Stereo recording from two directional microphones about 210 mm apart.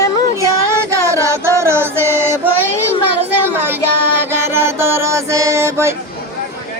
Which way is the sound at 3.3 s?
10° right (ahead or behind).